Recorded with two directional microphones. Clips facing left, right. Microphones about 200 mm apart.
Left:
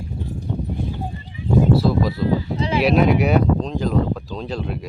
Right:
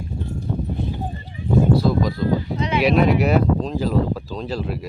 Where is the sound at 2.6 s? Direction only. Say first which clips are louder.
Left 1 dB; 30° left (ahead or behind).